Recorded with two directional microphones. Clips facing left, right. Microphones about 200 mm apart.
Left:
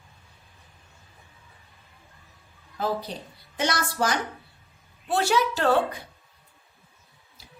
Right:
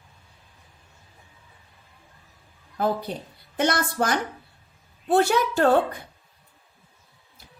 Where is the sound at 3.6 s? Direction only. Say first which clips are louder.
Right 3 dB; 55° right (ahead or behind).